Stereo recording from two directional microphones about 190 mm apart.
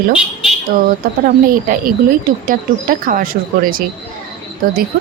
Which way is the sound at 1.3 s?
50° right (ahead or behind).